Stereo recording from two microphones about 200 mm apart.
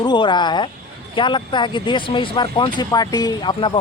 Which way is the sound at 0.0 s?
20° left (ahead or behind).